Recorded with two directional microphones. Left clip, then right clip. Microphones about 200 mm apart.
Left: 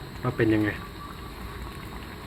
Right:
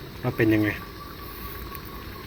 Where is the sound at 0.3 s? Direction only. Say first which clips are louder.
Right 2 dB; 15° right (ahead or behind).